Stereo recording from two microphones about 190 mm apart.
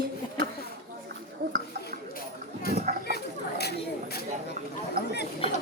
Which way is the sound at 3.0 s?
55° left (ahead or behind).